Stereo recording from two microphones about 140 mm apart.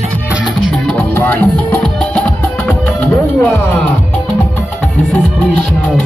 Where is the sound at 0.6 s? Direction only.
5° left (ahead or behind).